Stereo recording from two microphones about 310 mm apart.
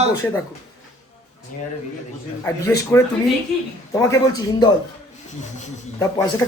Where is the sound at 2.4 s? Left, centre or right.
Centre.